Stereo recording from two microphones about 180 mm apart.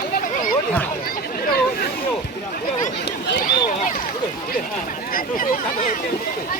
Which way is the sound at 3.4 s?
50° left (ahead or behind).